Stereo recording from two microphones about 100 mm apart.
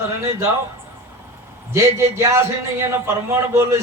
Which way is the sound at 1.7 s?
25° right (ahead or behind).